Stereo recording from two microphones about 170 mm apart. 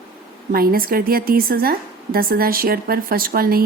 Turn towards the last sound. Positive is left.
turn(degrees=-60)  # may be behind; listen again after turning